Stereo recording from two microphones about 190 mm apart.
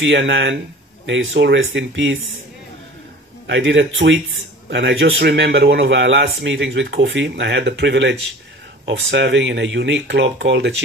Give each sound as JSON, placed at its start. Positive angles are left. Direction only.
{"t": 0.0, "sound": "speech", "side_deg": -75}
{"t": 3.4, "sound": "speech", "side_deg": -75}